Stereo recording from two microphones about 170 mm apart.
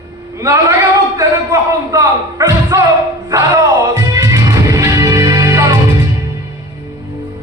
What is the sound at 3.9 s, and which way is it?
Music, 20° right (ahead or behind).